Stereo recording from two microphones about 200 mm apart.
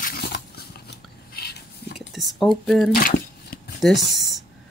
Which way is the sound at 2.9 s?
45° left (ahead or behind).